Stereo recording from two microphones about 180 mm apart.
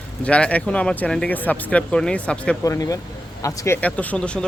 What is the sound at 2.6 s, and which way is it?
A man's voice, 20° left (ahead or behind).